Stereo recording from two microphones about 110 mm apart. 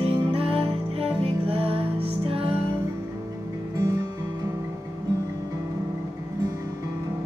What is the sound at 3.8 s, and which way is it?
Music, 30° right (ahead or behind).